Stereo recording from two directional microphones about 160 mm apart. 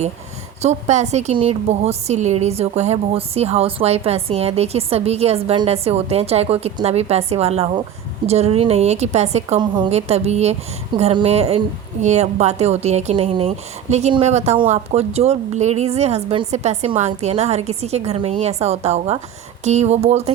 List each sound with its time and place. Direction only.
0.6 s a woman's voice: 45° right (ahead or behind)
9.6 s a woman's voice: 30° right (ahead or behind)
9.9 s a woman's voice: 40° right (ahead or behind)